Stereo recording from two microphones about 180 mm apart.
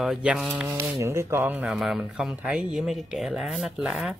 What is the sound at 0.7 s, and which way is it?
Speech, 15° right (ahead or behind).